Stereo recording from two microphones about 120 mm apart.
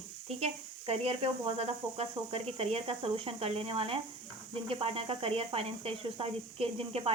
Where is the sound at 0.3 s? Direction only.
60° right (ahead or behind).